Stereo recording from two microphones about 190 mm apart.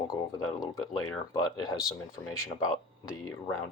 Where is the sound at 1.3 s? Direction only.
20° left (ahead or behind).